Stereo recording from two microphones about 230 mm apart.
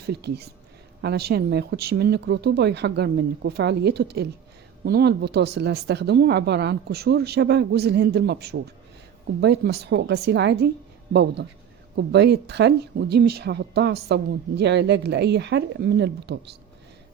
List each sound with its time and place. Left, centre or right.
0.0 s speech: right